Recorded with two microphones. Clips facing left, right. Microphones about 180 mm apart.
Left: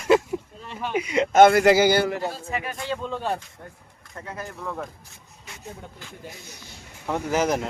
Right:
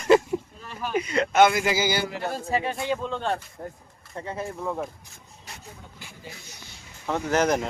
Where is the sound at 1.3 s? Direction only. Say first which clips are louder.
Left 6 dB; 55° left (ahead or behind).